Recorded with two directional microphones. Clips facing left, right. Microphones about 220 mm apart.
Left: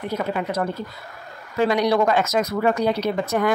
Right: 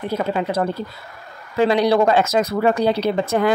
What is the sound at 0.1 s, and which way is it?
Speech, 30° right (ahead or behind).